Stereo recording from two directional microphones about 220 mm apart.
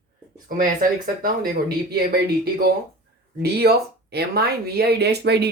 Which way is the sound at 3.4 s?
45° right (ahead or behind).